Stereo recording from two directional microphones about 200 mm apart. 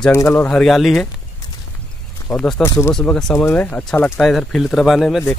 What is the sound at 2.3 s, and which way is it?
Speech, 5° left (ahead or behind).